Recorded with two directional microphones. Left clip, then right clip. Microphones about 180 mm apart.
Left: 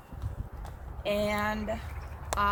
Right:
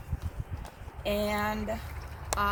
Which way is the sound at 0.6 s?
Centre (ahead or behind).